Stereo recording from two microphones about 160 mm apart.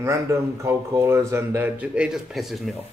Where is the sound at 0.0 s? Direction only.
20° right (ahead or behind).